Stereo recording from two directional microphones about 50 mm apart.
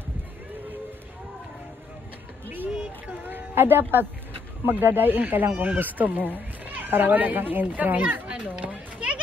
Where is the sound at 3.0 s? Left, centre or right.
Right.